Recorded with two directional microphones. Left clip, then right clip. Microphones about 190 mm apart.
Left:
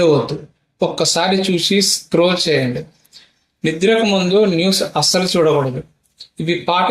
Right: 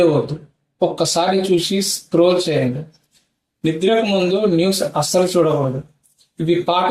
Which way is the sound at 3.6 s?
30° left (ahead or behind).